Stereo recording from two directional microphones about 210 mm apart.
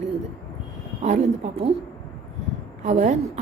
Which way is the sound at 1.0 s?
35° right (ahead or behind).